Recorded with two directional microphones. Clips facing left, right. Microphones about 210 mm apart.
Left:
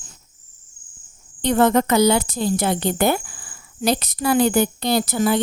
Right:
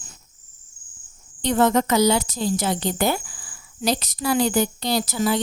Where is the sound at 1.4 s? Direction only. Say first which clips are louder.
Left 2 dB; 55° left (ahead or behind).